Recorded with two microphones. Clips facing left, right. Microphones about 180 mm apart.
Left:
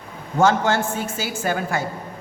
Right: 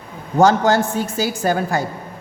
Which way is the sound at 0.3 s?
40° right (ahead or behind).